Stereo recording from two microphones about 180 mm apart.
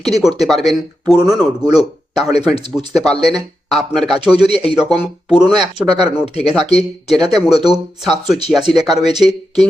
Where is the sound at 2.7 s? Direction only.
Centre (ahead or behind).